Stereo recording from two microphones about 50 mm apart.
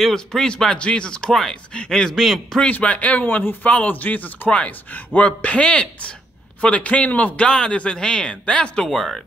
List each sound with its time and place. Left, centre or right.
0.0 s speech: centre
2.7 s a man's voice: left
8.8 s speech: centre